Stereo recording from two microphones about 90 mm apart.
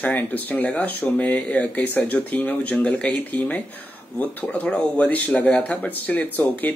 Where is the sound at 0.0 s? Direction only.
20° left (ahead or behind).